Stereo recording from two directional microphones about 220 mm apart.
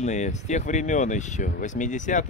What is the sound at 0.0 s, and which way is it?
Speech, 35° left (ahead or behind).